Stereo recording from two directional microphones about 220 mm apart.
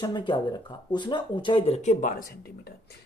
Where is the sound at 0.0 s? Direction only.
20° left (ahead or behind); by 2.2 s 35° left (ahead or behind).